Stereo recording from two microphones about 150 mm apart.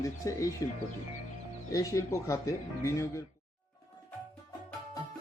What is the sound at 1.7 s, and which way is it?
Speech, 20° left (ahead or behind).